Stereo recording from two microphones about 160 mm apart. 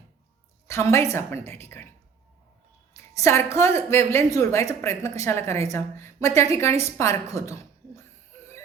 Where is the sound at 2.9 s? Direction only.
20° left (ahead or behind).